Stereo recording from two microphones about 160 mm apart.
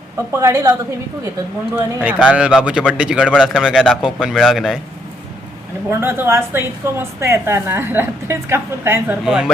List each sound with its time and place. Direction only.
0.3 s a woman's voice: 20° right (ahead or behind)
1.7 s a man's voice: 10° right (ahead or behind)
5.9 s a woman's voice: 15° right (ahead or behind)
9.2 s a man's voice: 5° right (ahead or behind)